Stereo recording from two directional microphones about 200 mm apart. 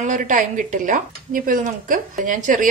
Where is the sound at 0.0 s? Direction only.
40° right (ahead or behind).